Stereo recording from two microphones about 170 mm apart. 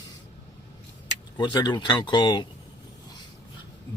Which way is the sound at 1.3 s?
25° left (ahead or behind).